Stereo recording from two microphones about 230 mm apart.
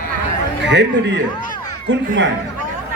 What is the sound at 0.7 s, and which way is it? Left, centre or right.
Speech, right.